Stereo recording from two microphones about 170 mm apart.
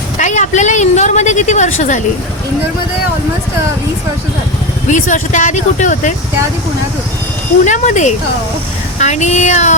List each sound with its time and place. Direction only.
0.2 s a woman's voice: 45° left (ahead or behind)
4.9 s a woman's voice: 50° left (ahead or behind)
7.6 s a woman's voice: 45° left (ahead or behind)